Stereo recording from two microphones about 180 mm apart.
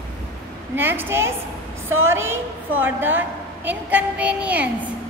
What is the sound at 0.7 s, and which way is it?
A woman's voice, 10° right (ahead or behind).